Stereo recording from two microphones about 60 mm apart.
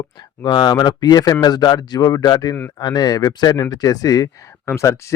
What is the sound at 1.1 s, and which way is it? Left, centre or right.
Speech, left.